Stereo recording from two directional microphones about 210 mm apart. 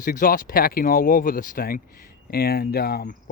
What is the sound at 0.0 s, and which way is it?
Speech, 40° left (ahead or behind).